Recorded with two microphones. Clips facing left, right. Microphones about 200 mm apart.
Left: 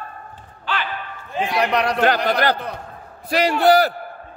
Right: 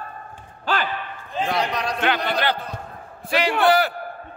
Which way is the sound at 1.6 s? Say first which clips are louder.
Left 5 dB; 65° left (ahead or behind).